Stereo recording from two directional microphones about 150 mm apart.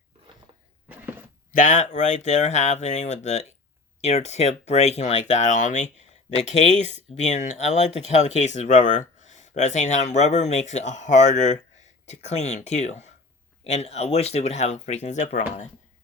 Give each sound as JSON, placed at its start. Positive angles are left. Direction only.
{"t": 1.5, "sound": "speech", "side_deg": 60}